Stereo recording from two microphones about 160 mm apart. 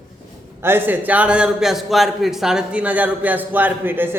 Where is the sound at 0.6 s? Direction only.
15° right (ahead or behind).